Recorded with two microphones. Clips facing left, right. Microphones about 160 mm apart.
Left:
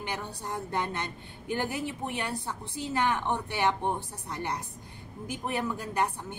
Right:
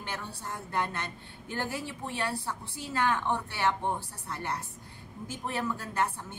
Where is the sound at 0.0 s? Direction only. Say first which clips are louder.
Left 3 dB; 15° left (ahead or behind).